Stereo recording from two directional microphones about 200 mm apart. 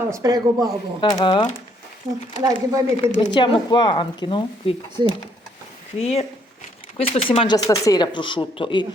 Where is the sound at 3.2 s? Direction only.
25° left (ahead or behind).